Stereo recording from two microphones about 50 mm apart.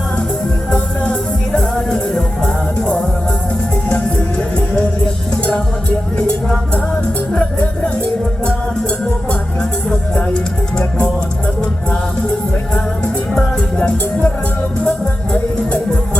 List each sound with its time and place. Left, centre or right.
1.5 s music: centre
10.8 s music: left
13.6 s music: left